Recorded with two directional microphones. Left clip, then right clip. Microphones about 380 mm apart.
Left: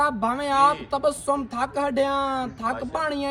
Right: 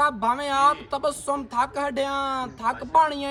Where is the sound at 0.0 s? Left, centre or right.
Centre.